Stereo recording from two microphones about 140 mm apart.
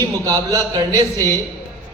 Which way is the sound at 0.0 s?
25° right (ahead or behind).